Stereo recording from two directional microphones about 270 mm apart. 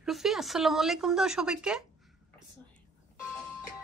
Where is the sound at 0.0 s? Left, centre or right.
Centre.